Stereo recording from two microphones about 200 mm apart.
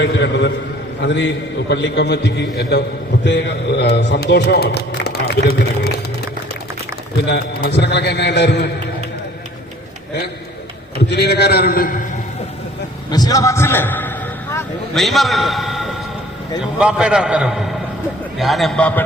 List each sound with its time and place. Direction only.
0.0 s speech: 60° left (ahead or behind)
7.3 s speech: 55° left (ahead or behind)
11.1 s a man's voice: 55° left (ahead or behind)
13.1 s a man's voice: 20° left (ahead or behind)